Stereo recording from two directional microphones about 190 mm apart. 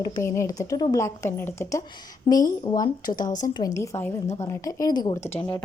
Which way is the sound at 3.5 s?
15° left (ahead or behind).